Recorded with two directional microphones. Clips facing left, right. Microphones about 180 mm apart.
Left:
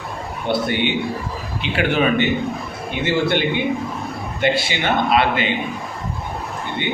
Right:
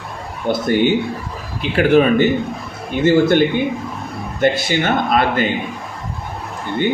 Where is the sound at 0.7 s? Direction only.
40° right (ahead or behind).